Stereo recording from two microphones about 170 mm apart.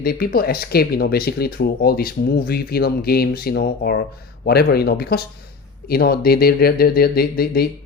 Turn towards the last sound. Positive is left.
turn(degrees=65)  # may be behind; listen again after turning